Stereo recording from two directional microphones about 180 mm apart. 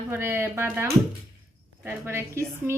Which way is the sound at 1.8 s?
15° right (ahead or behind).